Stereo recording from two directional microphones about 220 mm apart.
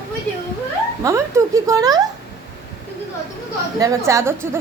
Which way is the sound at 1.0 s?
15° right (ahead or behind).